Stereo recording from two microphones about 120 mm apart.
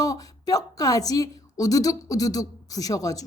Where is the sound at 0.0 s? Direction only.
30° left (ahead or behind).